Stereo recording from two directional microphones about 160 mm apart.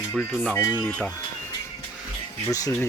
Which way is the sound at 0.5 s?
15° left (ahead or behind).